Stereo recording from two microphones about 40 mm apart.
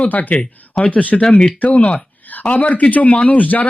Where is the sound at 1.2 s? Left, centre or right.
Left.